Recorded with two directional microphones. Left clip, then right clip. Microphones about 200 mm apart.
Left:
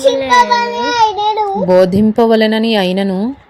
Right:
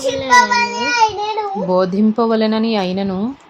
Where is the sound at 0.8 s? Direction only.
40° left (ahead or behind).